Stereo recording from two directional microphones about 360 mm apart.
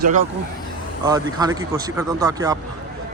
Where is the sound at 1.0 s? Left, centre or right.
Centre.